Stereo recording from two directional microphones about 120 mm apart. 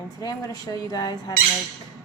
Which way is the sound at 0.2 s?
30° left (ahead or behind).